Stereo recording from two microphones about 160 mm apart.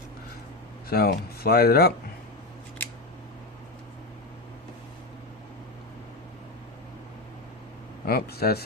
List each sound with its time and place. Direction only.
0.9 s speech: 75° left (ahead or behind)
8.0 s speech: 75° left (ahead or behind)